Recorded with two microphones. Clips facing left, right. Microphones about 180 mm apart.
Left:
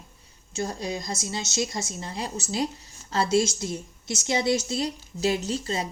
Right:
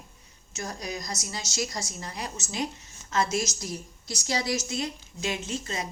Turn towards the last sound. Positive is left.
turn(degrees=30)  # may be behind; listen again after turning